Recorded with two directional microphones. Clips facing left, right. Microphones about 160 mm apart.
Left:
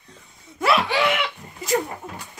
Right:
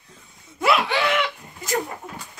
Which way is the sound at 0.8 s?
5° left (ahead or behind).